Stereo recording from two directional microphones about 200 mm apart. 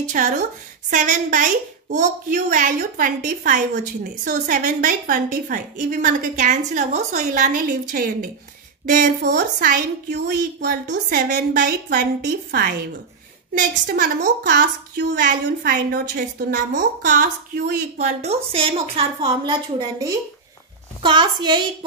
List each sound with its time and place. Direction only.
0.1 s a woman's voice: 40° right (ahead or behind)
9.2 s a woman's voice: 60° right (ahead or behind); by 21.6 s 20° right (ahead or behind)